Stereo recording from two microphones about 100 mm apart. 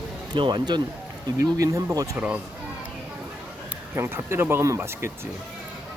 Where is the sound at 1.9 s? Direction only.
30° right (ahead or behind).